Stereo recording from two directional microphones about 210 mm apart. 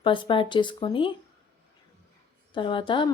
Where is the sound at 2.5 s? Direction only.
25° left (ahead or behind).